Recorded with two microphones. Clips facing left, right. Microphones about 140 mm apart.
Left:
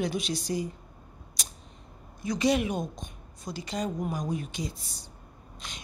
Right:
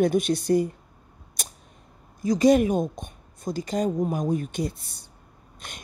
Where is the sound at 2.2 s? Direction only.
40° right (ahead or behind).